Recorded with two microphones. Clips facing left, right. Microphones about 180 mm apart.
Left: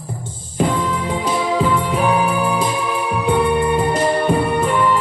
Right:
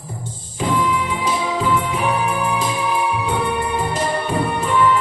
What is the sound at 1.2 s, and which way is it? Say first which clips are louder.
Music: left 3 dB; 60° left (ahead or behind).